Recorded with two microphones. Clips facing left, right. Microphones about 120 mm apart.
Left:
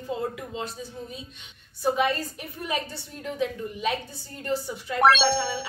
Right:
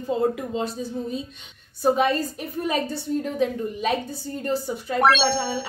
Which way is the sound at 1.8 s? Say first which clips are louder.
Right 4 dB; 35° right (ahead or behind).